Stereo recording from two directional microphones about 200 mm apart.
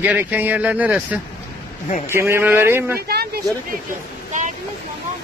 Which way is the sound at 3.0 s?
50° right (ahead or behind).